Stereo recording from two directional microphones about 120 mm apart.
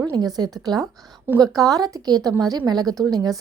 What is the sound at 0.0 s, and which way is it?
A woman's voice, 35° right (ahead or behind).